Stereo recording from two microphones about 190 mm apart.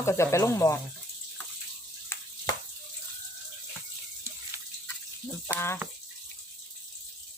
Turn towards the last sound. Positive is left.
turn(degrees=15)  # may be behind; listen again after turning